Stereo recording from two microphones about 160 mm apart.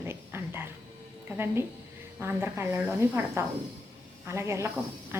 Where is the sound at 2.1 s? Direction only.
15° right (ahead or behind).